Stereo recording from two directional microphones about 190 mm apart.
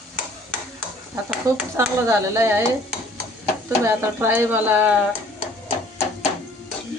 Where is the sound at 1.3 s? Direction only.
10° right (ahead or behind).